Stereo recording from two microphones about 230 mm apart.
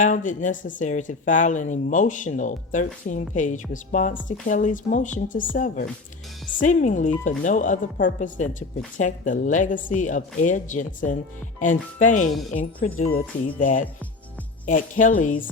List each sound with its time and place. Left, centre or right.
0.0 s speech: left
12.3 s speech: centre
12.5 s speech: left